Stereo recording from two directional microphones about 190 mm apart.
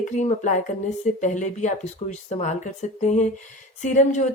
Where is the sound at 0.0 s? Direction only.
40° left (ahead or behind).